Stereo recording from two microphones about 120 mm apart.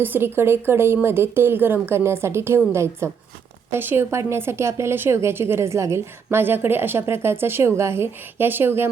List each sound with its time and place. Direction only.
0.0 s a woman's voice: 20° right (ahead or behind)